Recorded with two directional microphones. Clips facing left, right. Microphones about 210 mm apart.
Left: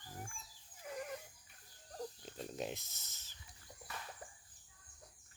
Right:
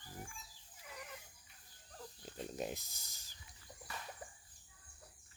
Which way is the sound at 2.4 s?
Centre (ahead or behind).